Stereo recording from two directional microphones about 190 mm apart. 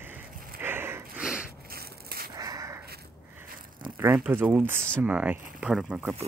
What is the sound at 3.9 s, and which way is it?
Speech, 10° right (ahead or behind).